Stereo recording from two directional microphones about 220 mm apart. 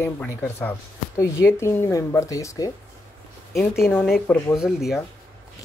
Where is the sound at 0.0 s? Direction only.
10° left (ahead or behind).